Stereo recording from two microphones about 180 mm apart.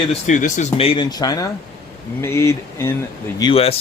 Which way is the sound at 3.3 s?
30° left (ahead or behind).